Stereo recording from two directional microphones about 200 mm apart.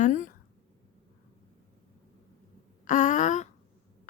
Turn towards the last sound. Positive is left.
turn(degrees=35)  # may be behind; listen again after turning